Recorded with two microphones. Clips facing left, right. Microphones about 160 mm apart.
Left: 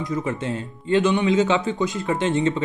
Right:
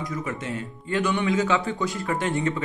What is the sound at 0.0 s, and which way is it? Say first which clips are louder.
A man's voice: left 5 dB; 25° left (ahead or behind).